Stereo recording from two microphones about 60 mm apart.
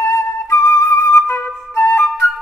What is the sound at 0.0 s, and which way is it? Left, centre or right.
Flute, left.